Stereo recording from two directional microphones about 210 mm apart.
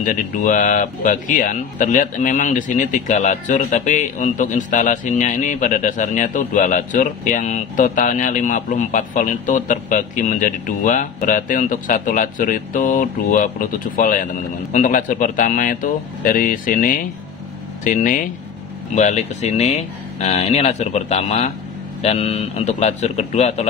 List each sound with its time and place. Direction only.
0.0 s speech: 40° left (ahead or behind)